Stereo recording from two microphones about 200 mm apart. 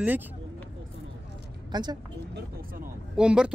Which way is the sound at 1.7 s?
20° right (ahead or behind).